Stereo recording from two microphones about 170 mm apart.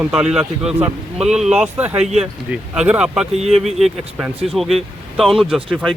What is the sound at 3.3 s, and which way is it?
Speech, 40° right (ahead or behind).